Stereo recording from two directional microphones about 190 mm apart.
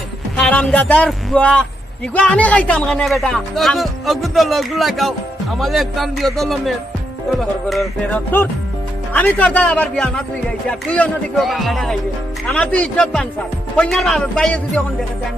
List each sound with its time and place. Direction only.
0.3 s speech: 5° left (ahead or behind)